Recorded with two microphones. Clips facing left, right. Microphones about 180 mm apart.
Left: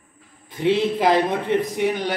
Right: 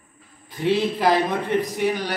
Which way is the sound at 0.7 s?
20° left (ahead or behind).